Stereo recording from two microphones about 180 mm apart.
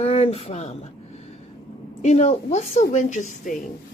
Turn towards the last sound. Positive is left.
turn(degrees=45)  # may be behind; listen again after turning